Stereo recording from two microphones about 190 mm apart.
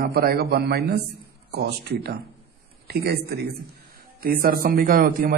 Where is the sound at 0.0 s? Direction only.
55° right (ahead or behind).